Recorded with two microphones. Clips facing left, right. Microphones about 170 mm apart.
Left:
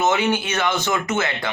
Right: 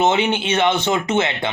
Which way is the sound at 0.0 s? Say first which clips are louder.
Right 2 dB; 25° right (ahead or behind).